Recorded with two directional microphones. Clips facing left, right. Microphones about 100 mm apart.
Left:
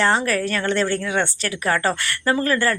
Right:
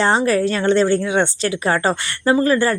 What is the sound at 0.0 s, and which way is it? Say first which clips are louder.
Speech: right 4 dB; 20° right (ahead or behind).